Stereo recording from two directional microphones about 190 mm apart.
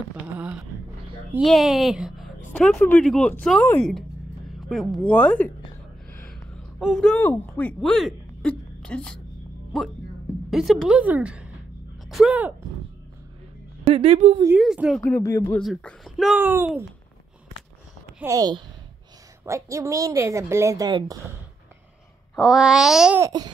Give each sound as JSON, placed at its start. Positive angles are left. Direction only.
{"t": 1.3, "sound": "speech", "side_deg": 0}
{"t": 6.1, "sound": "a sound", "side_deg": 5}
{"t": 6.8, "sound": "speech", "side_deg": 0}
{"t": 13.8, "sound": "speech", "side_deg": -30}
{"t": 14.6, "sound": "speech", "side_deg": 0}
{"t": 15.0, "sound": "speech", "side_deg": 15}
{"t": 15.6, "sound": "speech", "side_deg": 0}
{"t": 18.2, "sound": "a woman's voice", "side_deg": -20}
{"t": 22.3, "sound": "speech", "side_deg": 0}
{"t": 23.2, "sound": "a woman's voice", "side_deg": -20}